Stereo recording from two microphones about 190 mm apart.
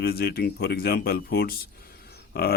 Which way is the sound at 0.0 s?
55° left (ahead or behind).